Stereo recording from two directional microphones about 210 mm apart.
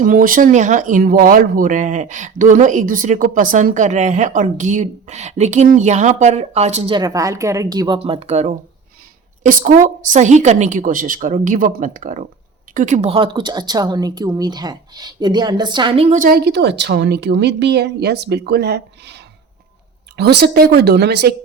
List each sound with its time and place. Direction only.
0.0 s speech: 40° right (ahead or behind)